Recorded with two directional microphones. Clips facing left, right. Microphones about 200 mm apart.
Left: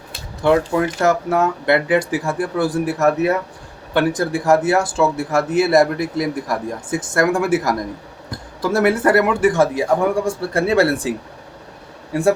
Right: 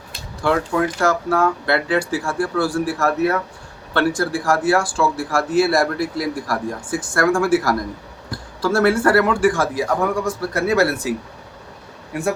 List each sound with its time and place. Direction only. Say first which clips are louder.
0.4 s speech: left 3 dB; 20° left (ahead or behind)
12.1 s speech: left 5 dB; 30° left (ahead or behind)